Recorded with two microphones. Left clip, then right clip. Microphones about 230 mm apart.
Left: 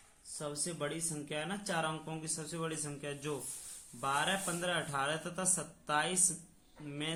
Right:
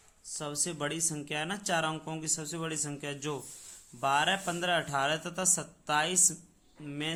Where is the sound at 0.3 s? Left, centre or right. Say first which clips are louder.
Right 4 dB; right.